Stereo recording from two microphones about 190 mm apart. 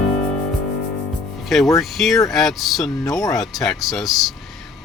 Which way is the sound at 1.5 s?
Centre (ahead or behind).